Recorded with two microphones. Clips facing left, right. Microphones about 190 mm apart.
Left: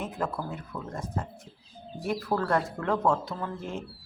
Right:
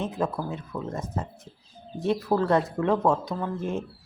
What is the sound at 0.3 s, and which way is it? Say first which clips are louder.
Speech: right 4 dB; 20° right (ahead or behind).